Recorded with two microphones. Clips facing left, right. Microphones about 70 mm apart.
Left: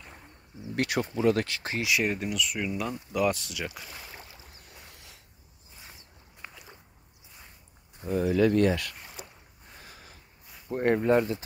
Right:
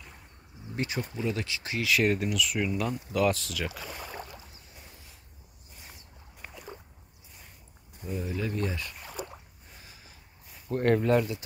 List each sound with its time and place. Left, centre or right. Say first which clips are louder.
0.7 s speech: left 5 dB; left
1.8 s speech: right 2 dB; centre
4.6 s a sound: left 1 dB; left
8.2 s speech: left 10 dB; left
9.8 s boat: left 4 dB; left
10.7 s speech: left 1 dB; centre